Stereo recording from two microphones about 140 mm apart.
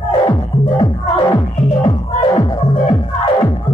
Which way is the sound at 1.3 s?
40° left (ahead or behind).